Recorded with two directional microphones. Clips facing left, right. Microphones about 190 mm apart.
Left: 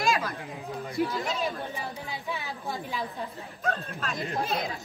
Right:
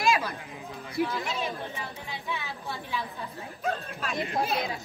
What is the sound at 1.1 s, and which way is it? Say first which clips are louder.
Speech: left 2 dB; 35° left (ahead or behind).